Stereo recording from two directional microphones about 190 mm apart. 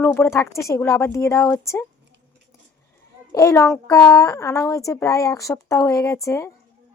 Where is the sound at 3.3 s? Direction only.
15° left (ahead or behind).